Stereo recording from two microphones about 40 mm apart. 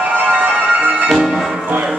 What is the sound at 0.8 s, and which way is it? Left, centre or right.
Music, right.